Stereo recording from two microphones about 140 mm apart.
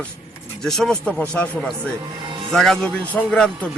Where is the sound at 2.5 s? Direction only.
5° left (ahead or behind).